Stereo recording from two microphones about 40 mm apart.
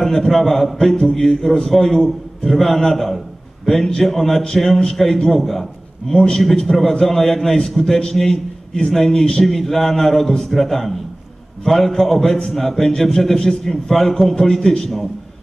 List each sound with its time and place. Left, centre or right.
0.0 s a man's voice: centre
6.1 s a man's voice: centre